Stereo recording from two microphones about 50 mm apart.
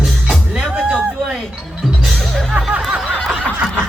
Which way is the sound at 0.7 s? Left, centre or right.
Centre.